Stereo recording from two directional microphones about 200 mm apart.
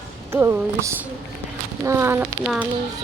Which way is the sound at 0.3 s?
15° right (ahead or behind).